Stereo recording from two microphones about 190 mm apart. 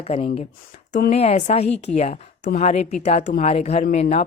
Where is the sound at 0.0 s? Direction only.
35° left (ahead or behind).